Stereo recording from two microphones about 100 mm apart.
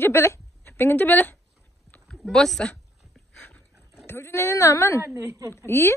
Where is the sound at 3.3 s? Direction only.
15° left (ahead or behind).